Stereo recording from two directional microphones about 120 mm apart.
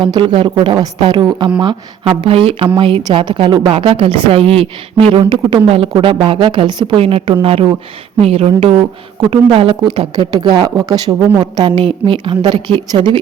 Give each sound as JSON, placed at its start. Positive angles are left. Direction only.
{"t": 0.1, "sound": "a woman's voice", "side_deg": -45}
{"t": 11.8, "sound": "speech", "side_deg": -50}